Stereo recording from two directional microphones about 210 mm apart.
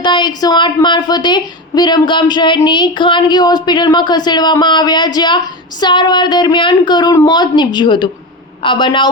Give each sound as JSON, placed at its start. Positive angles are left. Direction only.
{"t": 0.0, "sound": "a woman's voice", "side_deg": 20}